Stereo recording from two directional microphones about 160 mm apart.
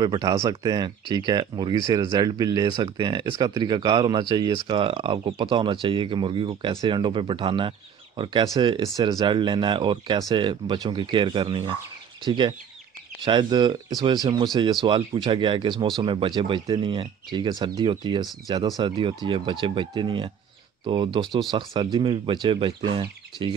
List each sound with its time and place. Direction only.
0.0 s speech: 25° right (ahead or behind)